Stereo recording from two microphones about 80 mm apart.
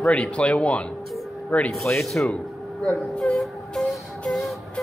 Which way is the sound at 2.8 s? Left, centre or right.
Centre.